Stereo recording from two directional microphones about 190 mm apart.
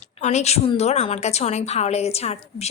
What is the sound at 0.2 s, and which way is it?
A woman's voice, 35° left (ahead or behind).